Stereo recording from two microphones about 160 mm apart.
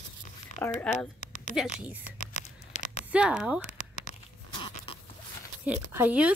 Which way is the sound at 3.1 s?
5° right (ahead or behind).